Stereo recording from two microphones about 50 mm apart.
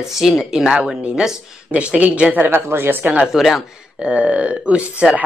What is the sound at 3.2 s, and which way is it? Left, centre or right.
Speech, centre.